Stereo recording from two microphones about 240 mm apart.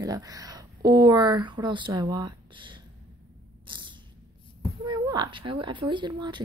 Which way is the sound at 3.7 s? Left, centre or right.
Centre.